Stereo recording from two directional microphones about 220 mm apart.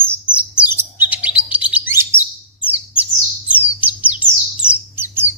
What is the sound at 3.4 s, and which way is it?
Bird, 5° right (ahead or behind).